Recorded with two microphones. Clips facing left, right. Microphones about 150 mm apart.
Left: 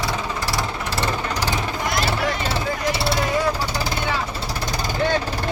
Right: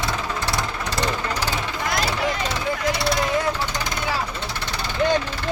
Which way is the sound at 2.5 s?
30° left (ahead or behind).